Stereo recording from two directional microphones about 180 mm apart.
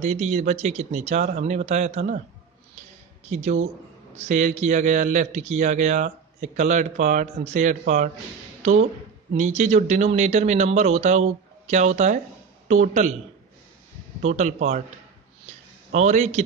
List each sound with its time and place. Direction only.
0.0 s a man's voice: 40° right (ahead or behind)
3.3 s a man's voice: 35° right (ahead or behind)
9.4 s a man's voice: 40° right (ahead or behind)
14.2 s a man's voice: 40° right (ahead or behind)
15.4 s a sound: 40° right (ahead or behind)